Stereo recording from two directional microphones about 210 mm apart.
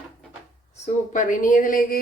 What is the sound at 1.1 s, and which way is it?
Speech, 40° left (ahead or behind).